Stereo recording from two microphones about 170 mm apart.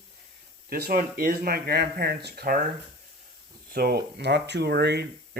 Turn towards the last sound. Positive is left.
turn(degrees=-75)  # may be behind; listen again after turning